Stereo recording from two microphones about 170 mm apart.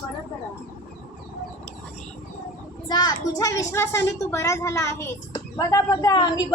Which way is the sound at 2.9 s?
25° left (ahead or behind).